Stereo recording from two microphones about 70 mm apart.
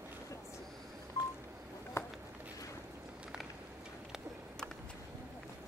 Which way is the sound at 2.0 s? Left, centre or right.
Left.